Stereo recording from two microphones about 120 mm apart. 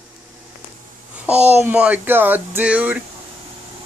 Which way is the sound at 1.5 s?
15° right (ahead or behind).